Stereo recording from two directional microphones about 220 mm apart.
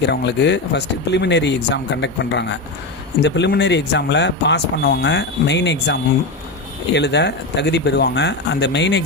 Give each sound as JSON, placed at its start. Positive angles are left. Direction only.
{"t": 0.0, "sound": "speech", "side_deg": 50}